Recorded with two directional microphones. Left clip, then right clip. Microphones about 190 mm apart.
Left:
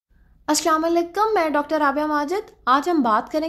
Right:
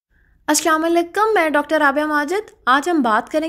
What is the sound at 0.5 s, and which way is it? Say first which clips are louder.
A woman's voice: right 3 dB; 25° right (ahead or behind).